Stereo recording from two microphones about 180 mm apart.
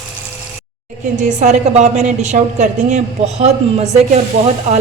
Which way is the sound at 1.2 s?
40° right (ahead or behind).